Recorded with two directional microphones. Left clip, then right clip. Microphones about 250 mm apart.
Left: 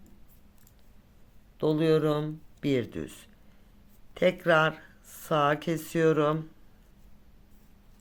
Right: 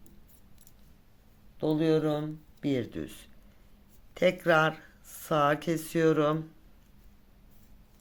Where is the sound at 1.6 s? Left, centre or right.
Centre.